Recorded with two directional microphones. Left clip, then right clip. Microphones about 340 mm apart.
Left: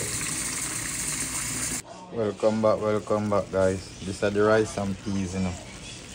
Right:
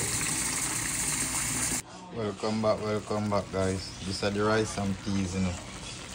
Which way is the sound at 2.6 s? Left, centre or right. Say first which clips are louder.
Left 5 dB; left.